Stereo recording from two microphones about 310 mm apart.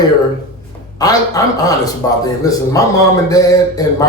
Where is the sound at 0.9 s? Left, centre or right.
Centre.